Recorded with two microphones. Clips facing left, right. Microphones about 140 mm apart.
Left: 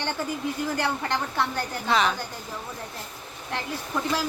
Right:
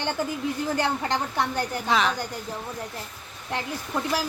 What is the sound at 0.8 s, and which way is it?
Speech, 20° right (ahead or behind).